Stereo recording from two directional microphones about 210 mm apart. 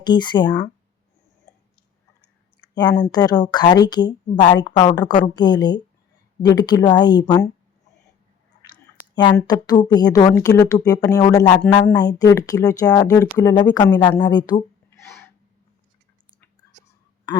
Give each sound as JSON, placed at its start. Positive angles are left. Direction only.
{"t": 0.0, "sound": "a woman's voice", "side_deg": 20}
{"t": 2.6, "sound": "a sound", "side_deg": 20}
{"t": 3.0, "sound": "a woman's voice", "side_deg": 20}
{"t": 8.7, "sound": "speech", "side_deg": 20}